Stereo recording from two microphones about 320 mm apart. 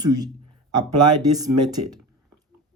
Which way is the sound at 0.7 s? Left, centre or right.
Right.